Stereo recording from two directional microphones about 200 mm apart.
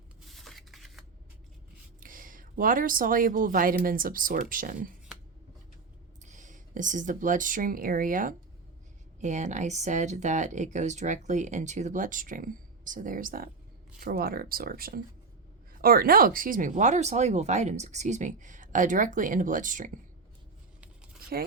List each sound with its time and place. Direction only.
0.3 s shuffling cards: centre (ahead or behind)
2.0 s speech: 40° right (ahead or behind)
6.2 s speech: 40° right (ahead or behind)